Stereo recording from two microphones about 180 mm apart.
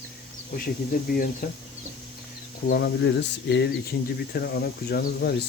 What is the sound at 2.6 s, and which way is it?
Speech, 65° left (ahead or behind).